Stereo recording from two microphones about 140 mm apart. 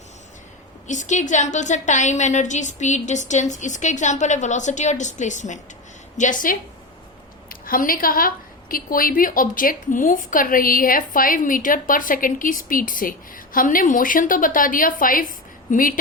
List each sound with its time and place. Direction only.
0.9 s a woman's voice: 60° left (ahead or behind)
7.6 s a woman's voice: 90° left